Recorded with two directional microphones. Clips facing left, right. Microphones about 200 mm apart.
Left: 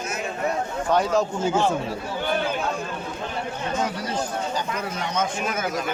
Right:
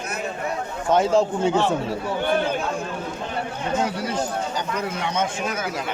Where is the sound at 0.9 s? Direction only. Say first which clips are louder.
Right 3 dB; 25° right (ahead or behind).